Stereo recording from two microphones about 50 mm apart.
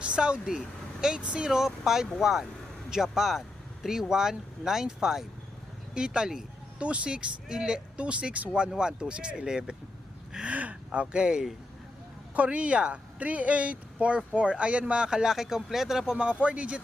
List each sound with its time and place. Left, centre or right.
0.0 s vehicle: right
1.2 s speech: right
1.5 s speech: centre
8.7 s speech: centre
10.4 s speech: right